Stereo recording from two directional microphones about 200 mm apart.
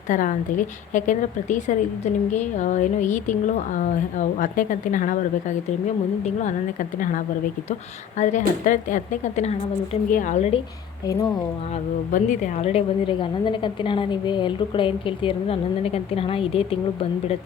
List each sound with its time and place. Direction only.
0.1 s speech: 40° left (ahead or behind)
8.2 s speech: 40° left (ahead or behind)
11.0 s speech: 15° left (ahead or behind)
12.1 s a woman's voice: 40° left (ahead or behind)